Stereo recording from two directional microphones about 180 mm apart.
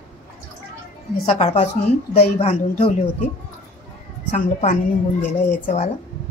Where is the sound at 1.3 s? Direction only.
35° left (ahead or behind).